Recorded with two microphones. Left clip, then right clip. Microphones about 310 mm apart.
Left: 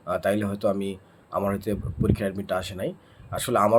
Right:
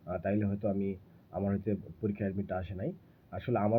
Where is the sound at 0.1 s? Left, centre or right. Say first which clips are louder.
Left 9 dB; centre.